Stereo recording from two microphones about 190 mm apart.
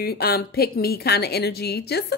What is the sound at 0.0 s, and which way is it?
A woman's voice, 55° left (ahead or behind).